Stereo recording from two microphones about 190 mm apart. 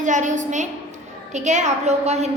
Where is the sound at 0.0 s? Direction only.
40° right (ahead or behind).